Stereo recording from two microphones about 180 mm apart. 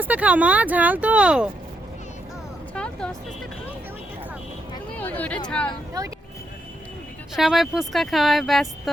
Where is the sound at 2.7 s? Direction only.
5° left (ahead or behind).